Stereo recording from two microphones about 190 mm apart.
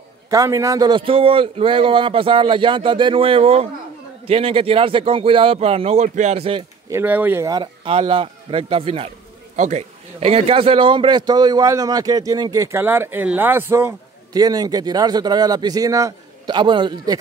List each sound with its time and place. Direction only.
0.3 s a man's voice: 15° right (ahead or behind)
6.9 s a man's voice: 10° right (ahead or behind)